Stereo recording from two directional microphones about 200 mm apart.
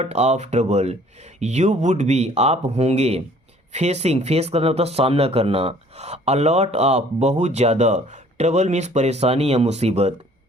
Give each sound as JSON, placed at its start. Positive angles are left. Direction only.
{"t": 0.0, "sound": "speech", "side_deg": -35}